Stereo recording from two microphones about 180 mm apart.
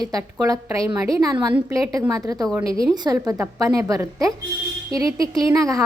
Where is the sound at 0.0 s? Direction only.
20° right (ahead or behind).